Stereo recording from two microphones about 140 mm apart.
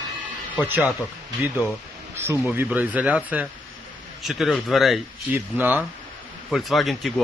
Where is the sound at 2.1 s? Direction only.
20° right (ahead or behind).